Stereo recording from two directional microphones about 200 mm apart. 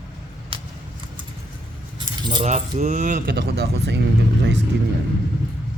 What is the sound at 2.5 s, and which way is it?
Speech, 35° right (ahead or behind).